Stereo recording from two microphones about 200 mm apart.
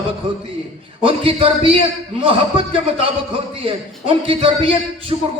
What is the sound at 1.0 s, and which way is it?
A man's voice, 25° right (ahead or behind).